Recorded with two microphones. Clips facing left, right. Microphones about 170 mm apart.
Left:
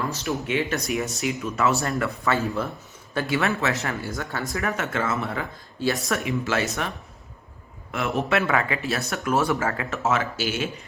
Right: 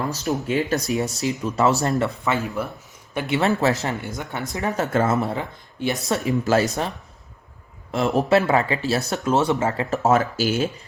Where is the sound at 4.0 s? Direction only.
20° right (ahead or behind).